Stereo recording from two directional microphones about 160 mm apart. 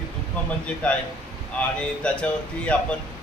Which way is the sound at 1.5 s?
10° left (ahead or behind).